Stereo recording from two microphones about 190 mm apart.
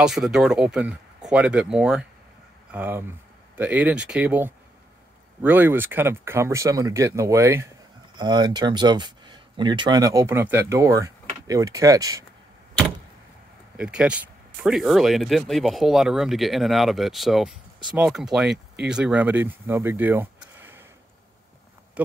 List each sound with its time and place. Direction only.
0.0 s speech: centre (ahead or behind); by 12.3 s 15° right (ahead or behind)
13.7 s speech: 5° right (ahead or behind)
22.0 s speech: 5° right (ahead or behind)